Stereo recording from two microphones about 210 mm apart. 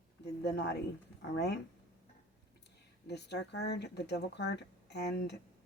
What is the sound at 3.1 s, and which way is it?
Speech, 55° left (ahead or behind).